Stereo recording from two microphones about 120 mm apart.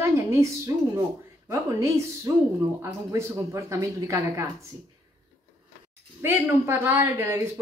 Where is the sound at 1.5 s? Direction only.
25° right (ahead or behind).